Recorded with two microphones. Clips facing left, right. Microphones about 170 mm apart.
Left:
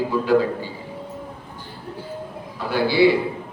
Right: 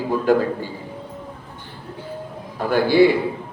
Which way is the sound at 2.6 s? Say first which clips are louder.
Right 4 dB; 50° right (ahead or behind).